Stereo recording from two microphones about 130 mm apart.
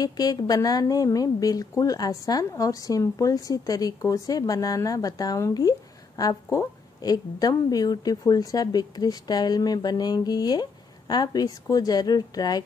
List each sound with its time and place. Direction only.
0.0 s a woman's voice: 30° left (ahead or behind)